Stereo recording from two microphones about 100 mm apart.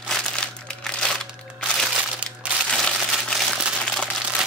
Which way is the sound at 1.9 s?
10° right (ahead or behind).